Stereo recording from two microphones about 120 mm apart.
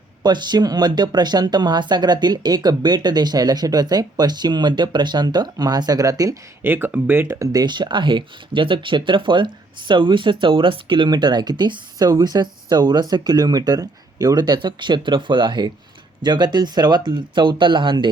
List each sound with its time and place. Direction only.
0.2 s speech: 35° right (ahead or behind)
6.7 s speech: 20° right (ahead or behind); by 18.1 s 40° right (ahead or behind)